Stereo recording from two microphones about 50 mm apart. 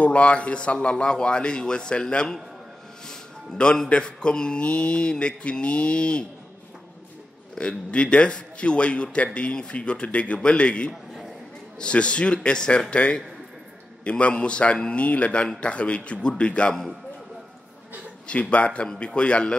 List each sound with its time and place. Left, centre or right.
0.0 s a man's voice: left
3.1 s music: centre
3.9 s a man's voice: centre
7.5 s a man's voice: left
18.2 s a man's voice: left